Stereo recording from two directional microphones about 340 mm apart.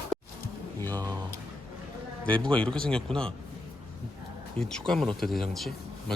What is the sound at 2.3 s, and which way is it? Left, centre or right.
A man's voice, centre.